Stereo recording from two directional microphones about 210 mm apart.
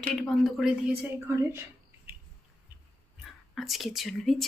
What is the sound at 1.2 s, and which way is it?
Speech, 10° right (ahead or behind).